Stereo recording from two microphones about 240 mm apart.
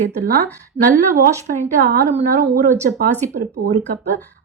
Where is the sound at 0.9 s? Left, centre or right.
Right.